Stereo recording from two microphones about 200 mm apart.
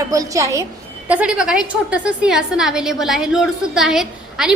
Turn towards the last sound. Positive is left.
turn(degrees=-5)  # may be behind; listen again after turning